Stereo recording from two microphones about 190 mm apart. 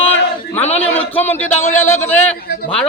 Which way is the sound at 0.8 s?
10° left (ahead or behind).